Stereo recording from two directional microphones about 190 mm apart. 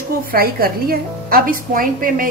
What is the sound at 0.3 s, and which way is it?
A woman's voice, 50° right (ahead or behind).